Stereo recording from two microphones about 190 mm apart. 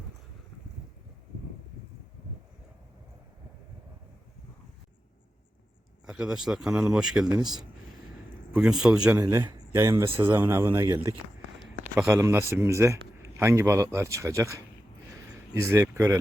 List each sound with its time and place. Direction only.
6.1 s speech: 5° right (ahead or behind)
7.3 s a man's voice: 20° right (ahead or behind)
8.5 s a man's voice: 5° right (ahead or behind)